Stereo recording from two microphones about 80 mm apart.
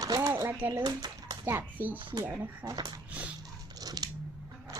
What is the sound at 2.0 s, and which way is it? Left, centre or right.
Speech, right.